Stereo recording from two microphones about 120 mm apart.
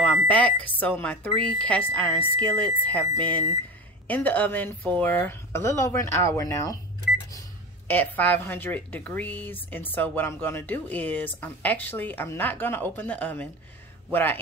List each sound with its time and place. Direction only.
0.0 s speech: 10° left (ahead or behind); by 6.8 s 30° left (ahead or behind)
7.9 s speech: 15° left (ahead or behind)